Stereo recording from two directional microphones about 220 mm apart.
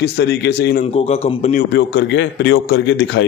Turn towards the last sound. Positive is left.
turn(degrees=55)  # may be behind; listen again after turning